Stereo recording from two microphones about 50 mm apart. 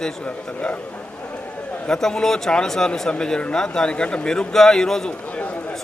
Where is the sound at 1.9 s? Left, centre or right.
Centre.